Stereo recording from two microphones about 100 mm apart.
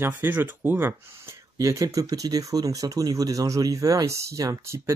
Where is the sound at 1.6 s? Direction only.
30° right (ahead or behind).